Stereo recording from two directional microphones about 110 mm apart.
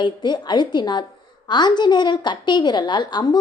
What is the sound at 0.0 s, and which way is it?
A woman's voice, 45° left (ahead or behind).